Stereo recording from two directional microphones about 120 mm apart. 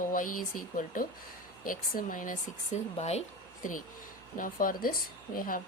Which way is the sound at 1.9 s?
90° left.